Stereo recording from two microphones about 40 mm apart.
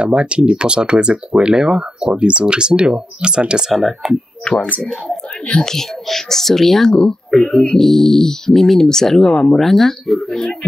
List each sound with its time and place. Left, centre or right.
0.0 s speech: right
3.7 s speech: centre
4.5 s speech: left; by 6.9 s centre
6.9 s speech: centre